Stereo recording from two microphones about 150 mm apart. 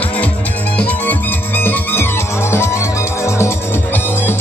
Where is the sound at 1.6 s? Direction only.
15° left (ahead or behind).